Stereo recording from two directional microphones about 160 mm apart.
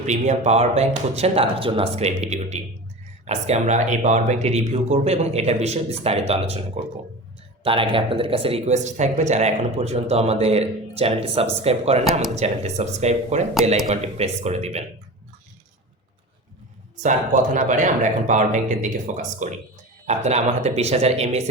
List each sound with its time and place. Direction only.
0.0 s speech: 45° right (ahead or behind)
7.6 s speech: 35° right (ahead or behind)
17.0 s speech: 50° right (ahead or behind)